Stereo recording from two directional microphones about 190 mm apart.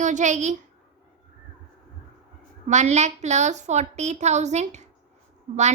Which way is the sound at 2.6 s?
35° right (ahead or behind).